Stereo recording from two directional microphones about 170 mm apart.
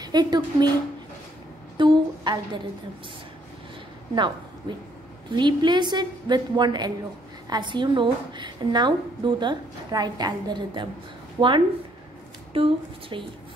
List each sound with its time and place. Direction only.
0.0 s a woman's voice: 25° right (ahead or behind)
1.8 s a woman's voice: 25° right (ahead or behind)
4.1 s a woman's voice: 25° right (ahead or behind)